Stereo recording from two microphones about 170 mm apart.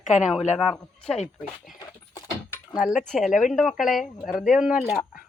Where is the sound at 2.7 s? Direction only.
5° right (ahead or behind).